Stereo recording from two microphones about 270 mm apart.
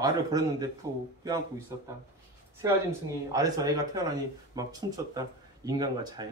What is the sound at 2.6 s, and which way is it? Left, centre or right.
Speech, centre.